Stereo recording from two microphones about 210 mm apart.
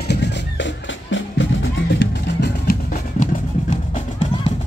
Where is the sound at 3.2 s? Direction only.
35° left (ahead or behind).